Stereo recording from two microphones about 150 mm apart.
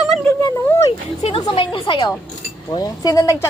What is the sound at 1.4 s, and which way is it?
A woman's voice, 35° left (ahead or behind).